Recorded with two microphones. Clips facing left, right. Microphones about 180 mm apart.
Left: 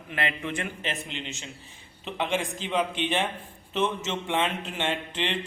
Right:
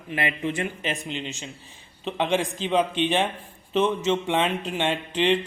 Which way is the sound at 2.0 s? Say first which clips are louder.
Right 4 dB; 20° right (ahead or behind).